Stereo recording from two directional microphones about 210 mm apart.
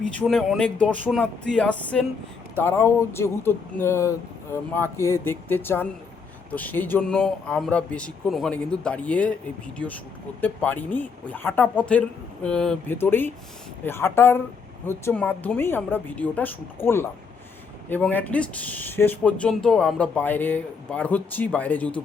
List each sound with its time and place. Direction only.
0.0 s speech: 5° left (ahead or behind)
10.4 s speech: 10° left (ahead or behind)